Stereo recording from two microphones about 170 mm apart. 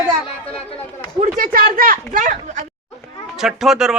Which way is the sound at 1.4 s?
55° right (ahead or behind).